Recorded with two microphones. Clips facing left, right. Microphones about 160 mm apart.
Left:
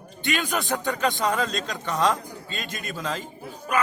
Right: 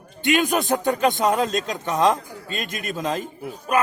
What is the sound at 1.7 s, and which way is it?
Speech, 45° right (ahead or behind).